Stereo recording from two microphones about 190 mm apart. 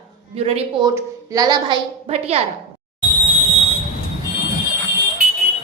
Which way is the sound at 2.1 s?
30° right (ahead or behind).